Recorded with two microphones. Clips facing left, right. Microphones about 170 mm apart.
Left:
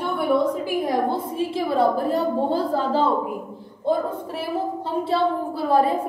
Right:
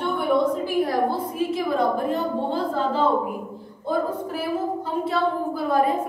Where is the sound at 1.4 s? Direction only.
30° left (ahead or behind).